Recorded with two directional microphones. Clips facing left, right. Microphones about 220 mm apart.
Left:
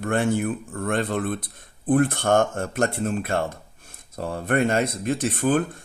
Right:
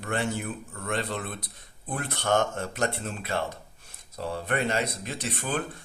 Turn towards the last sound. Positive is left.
turn(degrees=50)  # may be behind; listen again after turning